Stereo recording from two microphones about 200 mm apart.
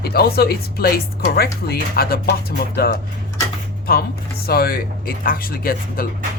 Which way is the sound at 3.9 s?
50° left (ahead or behind).